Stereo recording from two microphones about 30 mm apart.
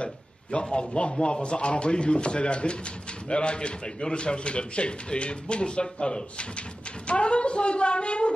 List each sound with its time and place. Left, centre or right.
0.0 s a man's voice: left